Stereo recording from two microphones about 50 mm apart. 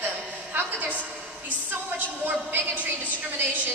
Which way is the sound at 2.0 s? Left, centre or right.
Right.